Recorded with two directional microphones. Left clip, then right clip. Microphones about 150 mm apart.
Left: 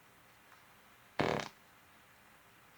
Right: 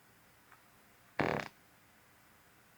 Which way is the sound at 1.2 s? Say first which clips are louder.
Even; 20° left (ahead or behind).